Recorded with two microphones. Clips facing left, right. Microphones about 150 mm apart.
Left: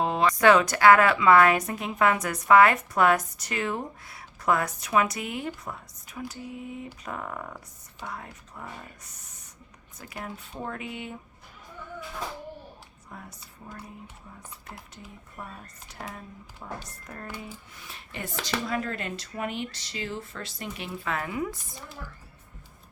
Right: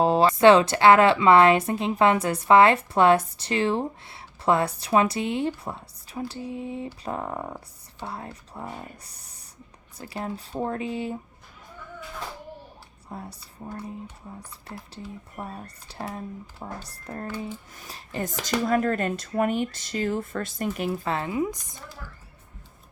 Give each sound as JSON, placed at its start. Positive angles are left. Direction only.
{"t": 0.0, "sound": "speech", "side_deg": -35}
{"t": 13.1, "sound": "speech", "side_deg": -30}
{"t": 21.1, "sound": "speech", "side_deg": -25}